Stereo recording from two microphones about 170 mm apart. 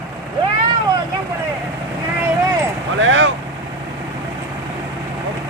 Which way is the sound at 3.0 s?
90° right.